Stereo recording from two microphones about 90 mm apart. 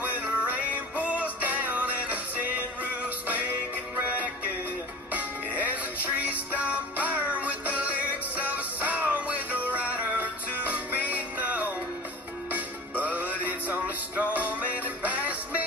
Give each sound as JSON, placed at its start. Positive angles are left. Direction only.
{"t": 0.2, "sound": "music", "side_deg": -15}
{"t": 5.1, "sound": "music", "side_deg": -15}